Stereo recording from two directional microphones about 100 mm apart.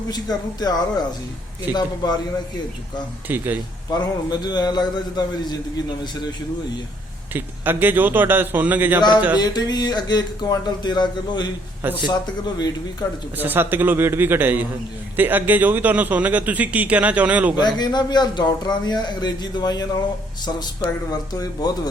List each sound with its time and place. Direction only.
0.1 s speech: 40° left (ahead or behind)
3.2 s speech: 20° right (ahead or behind)
3.8 s speech: 40° left (ahead or behind)
7.3 s speech: 20° right (ahead or behind)
9.0 s speech: 45° left (ahead or behind)
13.3 s a man's voice: 20° right (ahead or behind)
17.6 s speech: 45° left (ahead or behind)
21.1 s speech: 40° left (ahead or behind)